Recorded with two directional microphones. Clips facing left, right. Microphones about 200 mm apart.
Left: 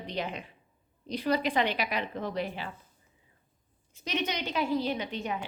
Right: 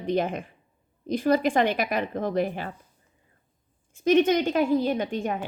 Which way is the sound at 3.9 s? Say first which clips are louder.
Right 13 dB; 50° right (ahead or behind).